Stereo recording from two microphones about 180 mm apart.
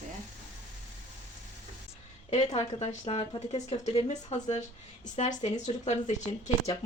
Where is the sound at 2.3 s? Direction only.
35° left (ahead or behind).